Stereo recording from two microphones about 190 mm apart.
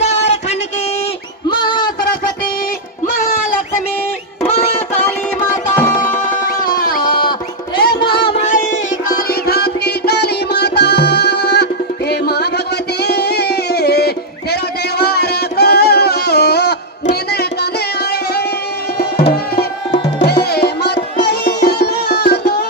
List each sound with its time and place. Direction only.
1.5 s music: 25° left (ahead or behind)
4.9 s music: 10° left (ahead or behind)
6.2 s music: 45° left (ahead or behind)
7.0 s music: 25° left (ahead or behind)
7.8 s music: 55° left (ahead or behind)
8.1 s music: 30° left (ahead or behind)
8.4 s music: 40° left (ahead or behind); by 17.7 s 60° left (ahead or behind)
20.1 s music: 60° left (ahead or behind)